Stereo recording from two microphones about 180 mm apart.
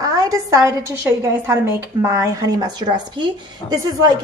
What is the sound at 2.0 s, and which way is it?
A woman's voice, 15° right (ahead or behind).